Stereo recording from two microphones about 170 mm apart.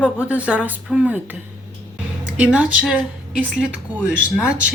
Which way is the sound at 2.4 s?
5° right (ahead or behind).